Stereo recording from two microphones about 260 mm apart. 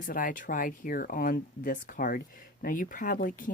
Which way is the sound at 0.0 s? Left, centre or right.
Left.